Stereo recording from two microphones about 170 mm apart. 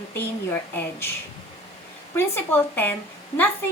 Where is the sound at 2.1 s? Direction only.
15° left (ahead or behind).